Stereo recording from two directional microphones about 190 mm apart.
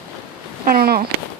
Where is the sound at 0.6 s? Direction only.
50° right (ahead or behind).